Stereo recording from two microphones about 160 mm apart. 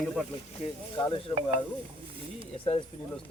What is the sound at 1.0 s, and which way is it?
Speech, 30° left (ahead or behind).